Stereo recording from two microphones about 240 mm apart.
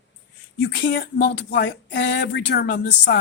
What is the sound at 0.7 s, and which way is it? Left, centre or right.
Speech, left.